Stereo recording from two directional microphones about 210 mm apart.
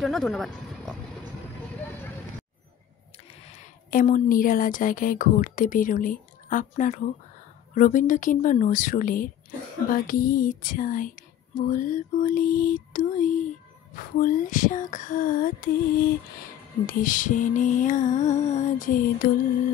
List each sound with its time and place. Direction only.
0.0 s speech: centre (ahead or behind)
3.3 s speech: 30° left (ahead or behind)
7.7 s a sound: 40° left (ahead or behind)